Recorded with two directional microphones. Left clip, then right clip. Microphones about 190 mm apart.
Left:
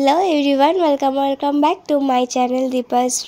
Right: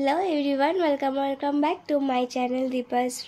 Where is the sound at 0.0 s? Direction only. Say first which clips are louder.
Left 9 dB; 35° left (ahead or behind).